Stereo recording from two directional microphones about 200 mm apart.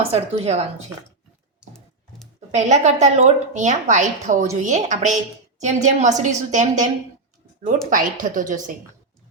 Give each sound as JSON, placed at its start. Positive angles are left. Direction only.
{"t": 0.0, "sound": "a woman's voice", "side_deg": -30}
{"t": 2.5, "sound": "a woman's voice", "side_deg": -35}